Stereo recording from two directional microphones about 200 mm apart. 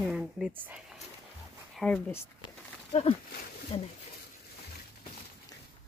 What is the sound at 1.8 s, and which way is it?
Speech, 10° left (ahead or behind).